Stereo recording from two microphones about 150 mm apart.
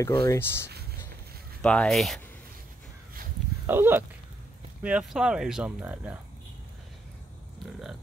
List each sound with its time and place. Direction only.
0.0 s speech: 25° left (ahead or behind)
1.6 s speech: 5° left (ahead or behind)
3.6 s speech: 15° right (ahead or behind)